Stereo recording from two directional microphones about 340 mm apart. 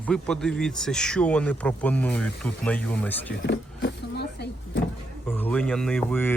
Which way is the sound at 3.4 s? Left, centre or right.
Left.